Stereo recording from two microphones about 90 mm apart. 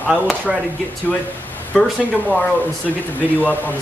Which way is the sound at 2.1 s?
20° left (ahead or behind).